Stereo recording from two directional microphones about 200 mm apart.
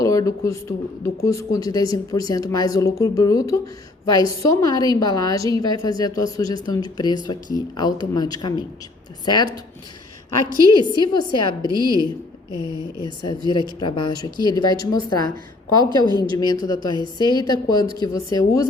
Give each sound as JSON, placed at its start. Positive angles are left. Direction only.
{"t": 0.0, "sound": "a sound", "side_deg": 15}
{"t": 1.0, "sound": "a woman's voice", "side_deg": 15}
{"t": 10.4, "sound": "a woman's voice", "side_deg": -15}
{"t": 10.7, "sound": "a woman's voice", "side_deg": 20}
{"t": 11.7, "sound": "a woman's voice", "side_deg": -20}
{"t": 13.0, "sound": "a woman's voice", "side_deg": 20}
{"t": 15.9, "sound": "a woman's voice", "side_deg": -20}
{"t": 16.4, "sound": "a woman's voice", "side_deg": 20}